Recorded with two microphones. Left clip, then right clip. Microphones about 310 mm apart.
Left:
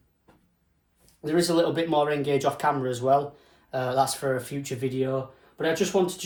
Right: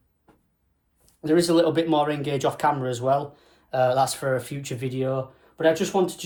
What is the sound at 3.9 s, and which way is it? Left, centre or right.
Speech, right.